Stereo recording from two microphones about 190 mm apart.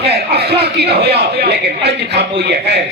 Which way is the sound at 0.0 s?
60° right (ahead or behind).